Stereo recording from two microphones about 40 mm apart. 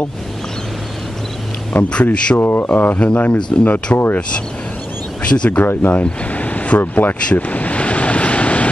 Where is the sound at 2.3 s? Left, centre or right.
Left.